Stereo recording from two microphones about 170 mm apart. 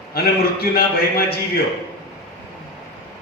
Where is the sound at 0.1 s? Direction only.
65° left (ahead or behind).